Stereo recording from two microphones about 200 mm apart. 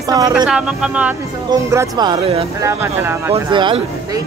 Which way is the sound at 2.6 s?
10° right (ahead or behind).